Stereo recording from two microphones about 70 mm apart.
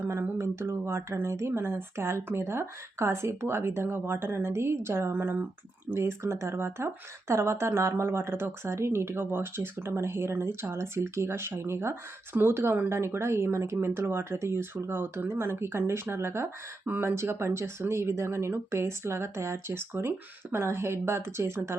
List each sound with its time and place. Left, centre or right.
0.1 s speech: right
5.1 s speech: right
5.9 s speech: right
16.8 s speech: right